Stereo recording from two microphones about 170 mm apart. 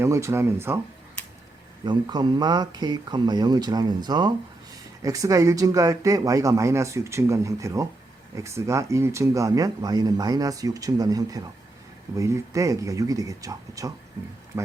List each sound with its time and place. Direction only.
0.0 s speech: 15° right (ahead or behind)
1.8 s speech: 25° right (ahead or behind)